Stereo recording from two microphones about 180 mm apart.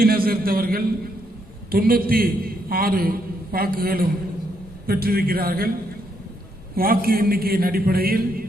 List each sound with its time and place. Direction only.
0.0 s a man's voice: 55° right (ahead or behind)
6.7 s a man's voice: 55° right (ahead or behind)